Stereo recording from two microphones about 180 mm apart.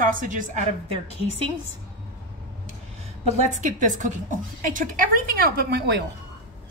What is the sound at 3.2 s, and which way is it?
A woman's voice, 45° right (ahead or behind).